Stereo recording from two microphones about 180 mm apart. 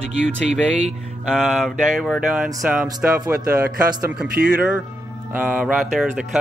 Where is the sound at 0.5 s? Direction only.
35° right (ahead or behind).